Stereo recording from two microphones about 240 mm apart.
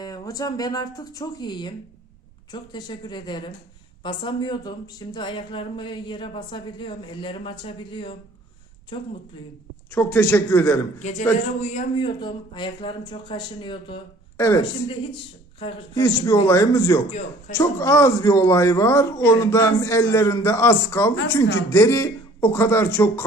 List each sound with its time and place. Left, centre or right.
0.0 s speech: centre
9.9 s speech: centre
11.6 s speech: left
16.0 s speech: centre